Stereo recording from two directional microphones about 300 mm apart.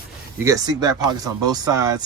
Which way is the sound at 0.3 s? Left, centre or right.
Centre.